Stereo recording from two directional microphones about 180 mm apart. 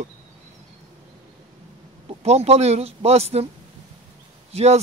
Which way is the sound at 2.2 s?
35° right (ahead or behind).